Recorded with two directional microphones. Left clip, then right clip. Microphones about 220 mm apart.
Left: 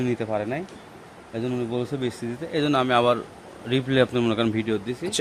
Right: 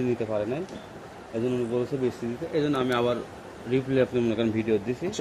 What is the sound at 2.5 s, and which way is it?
A man's voice, 50° left (ahead or behind).